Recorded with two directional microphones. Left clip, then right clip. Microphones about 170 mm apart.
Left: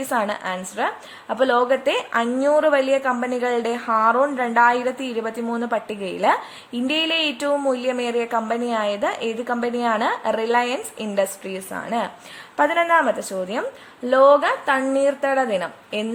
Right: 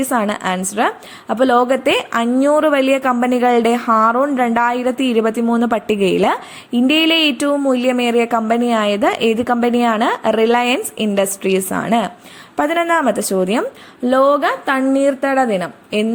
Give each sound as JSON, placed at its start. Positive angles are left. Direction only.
{"t": 0.1, "sound": "a woman's voice", "side_deg": -25}